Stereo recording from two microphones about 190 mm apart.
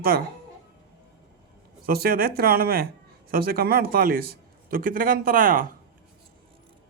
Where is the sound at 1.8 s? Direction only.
50° right (ahead or behind).